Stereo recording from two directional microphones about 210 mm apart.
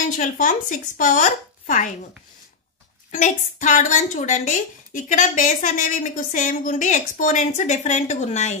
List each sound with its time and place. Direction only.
0.2 s a woman's voice: 40° left (ahead or behind)
3.1 s a woman's voice: 35° left (ahead or behind)